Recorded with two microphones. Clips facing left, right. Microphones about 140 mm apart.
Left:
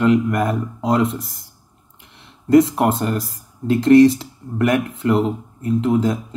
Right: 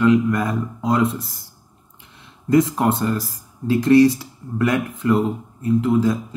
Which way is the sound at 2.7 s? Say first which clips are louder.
Left 1 dB; 90° left.